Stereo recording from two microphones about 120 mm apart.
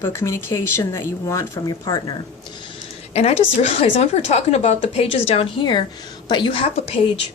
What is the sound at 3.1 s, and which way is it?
A woman's voice, 60° left (ahead or behind).